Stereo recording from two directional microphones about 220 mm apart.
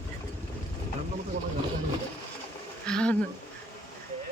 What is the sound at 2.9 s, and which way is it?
Speech, 5° left (ahead or behind).